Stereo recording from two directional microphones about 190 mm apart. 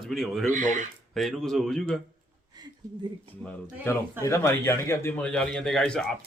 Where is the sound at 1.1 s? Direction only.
Centre (ahead or behind).